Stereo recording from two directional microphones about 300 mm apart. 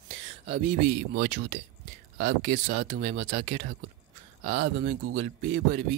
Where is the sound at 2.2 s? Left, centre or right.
Right.